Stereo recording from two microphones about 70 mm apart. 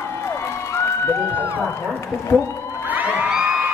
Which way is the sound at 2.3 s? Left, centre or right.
Centre.